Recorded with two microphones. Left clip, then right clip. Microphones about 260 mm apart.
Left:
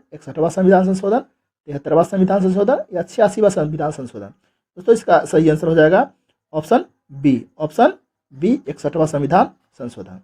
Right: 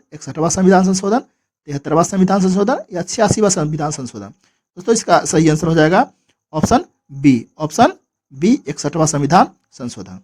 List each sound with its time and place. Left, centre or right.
0.1 s speech: right